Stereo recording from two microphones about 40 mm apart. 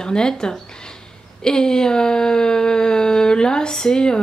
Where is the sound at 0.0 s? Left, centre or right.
Centre.